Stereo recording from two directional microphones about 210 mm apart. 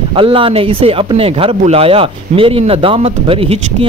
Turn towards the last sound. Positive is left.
turn(degrees=-25)  # may be behind; listen again after turning